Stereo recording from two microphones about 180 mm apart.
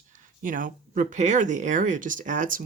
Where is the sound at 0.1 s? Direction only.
50° right (ahead or behind).